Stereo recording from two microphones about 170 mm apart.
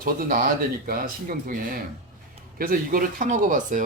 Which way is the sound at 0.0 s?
55° right (ahead or behind).